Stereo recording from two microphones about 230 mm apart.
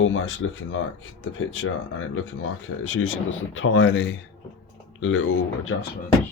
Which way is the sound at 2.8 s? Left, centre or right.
Left.